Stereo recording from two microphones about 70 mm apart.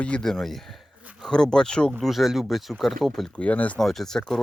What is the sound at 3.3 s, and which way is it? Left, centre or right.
Speech, left.